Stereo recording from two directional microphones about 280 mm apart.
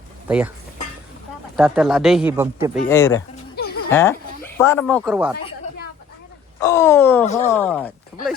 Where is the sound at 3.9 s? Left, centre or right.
Centre.